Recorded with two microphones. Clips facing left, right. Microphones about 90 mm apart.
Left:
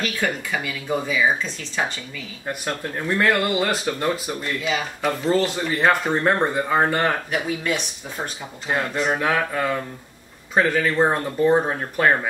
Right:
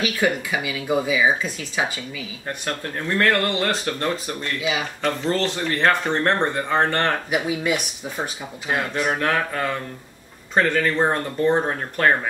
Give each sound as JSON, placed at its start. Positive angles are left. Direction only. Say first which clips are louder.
{"t": 0.0, "sound": "speech", "louder": "right 3 dB", "side_deg": -5}
{"t": 2.4, "sound": "speech", "louder": "left 2 dB", "side_deg": 10}
{"t": 4.6, "sound": "speech", "louder": "even", "side_deg": -5}
{"t": 5.0, "sound": "speech", "louder": "left 2 dB", "side_deg": 10}
{"t": 7.2, "sound": "speech", "louder": "right 2 dB", "side_deg": -10}